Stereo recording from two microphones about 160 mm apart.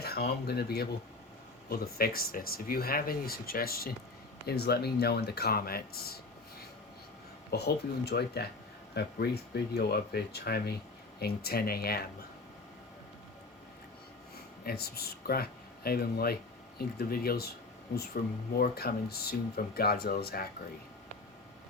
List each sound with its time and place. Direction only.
0.0 s speech: 80° left
1.7 s speech: 75° left (ahead or behind)
4.4 s speech: 85° left
7.5 s speech: 90° left; by 12.0 s 75° left (ahead or behind)
14.6 s speech: 75° left (ahead or behind)